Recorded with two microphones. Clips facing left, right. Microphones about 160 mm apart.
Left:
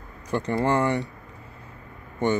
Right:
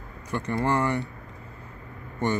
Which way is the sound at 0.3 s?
30° left (ahead or behind).